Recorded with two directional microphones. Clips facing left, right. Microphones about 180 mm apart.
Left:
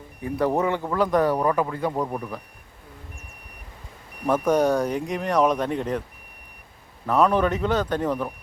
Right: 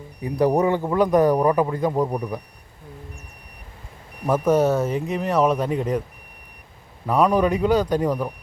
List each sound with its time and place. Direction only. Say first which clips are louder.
0.2 s speech: right 4 dB; 15° right (ahead or behind)
4.3 s speech: right 2 dB; 5° right (ahead or behind)
7.1 s speech: right 2 dB; 10° right (ahead or behind)